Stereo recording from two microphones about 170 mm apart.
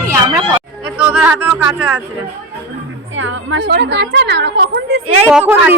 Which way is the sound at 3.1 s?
90° right.